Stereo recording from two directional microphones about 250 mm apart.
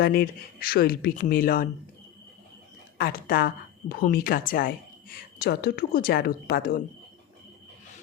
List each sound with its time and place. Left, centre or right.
0.0 s a woman's voice: left
3.0 s a woman's voice: left